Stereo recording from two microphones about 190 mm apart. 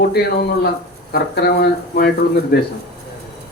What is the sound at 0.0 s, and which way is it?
Speech, 55° left (ahead or behind).